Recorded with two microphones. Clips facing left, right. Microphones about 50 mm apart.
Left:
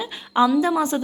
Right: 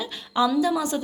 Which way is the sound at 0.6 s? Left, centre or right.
Left.